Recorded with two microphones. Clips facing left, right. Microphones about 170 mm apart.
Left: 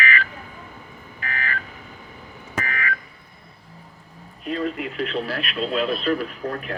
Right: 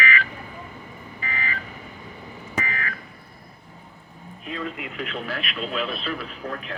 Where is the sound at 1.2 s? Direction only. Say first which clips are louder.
Left 2 dB; 55° left (ahead or behind).